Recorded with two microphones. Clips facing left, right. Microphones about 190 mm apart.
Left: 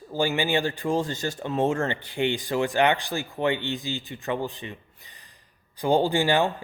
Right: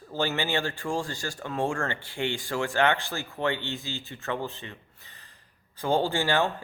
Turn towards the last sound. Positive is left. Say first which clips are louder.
# left 3 dB
turn(degrees=15)  # may be behind; listen again after turning